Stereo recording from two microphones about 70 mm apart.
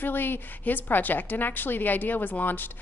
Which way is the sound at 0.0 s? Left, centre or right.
Left.